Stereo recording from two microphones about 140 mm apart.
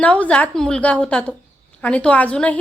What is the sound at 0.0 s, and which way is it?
A woman's voice, 10° left (ahead or behind).